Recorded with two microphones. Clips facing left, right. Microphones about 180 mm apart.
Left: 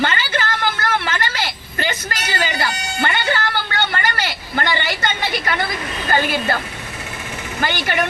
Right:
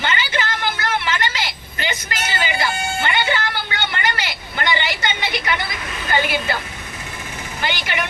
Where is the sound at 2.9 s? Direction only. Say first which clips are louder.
Left 3 dB; 50° left (ahead or behind).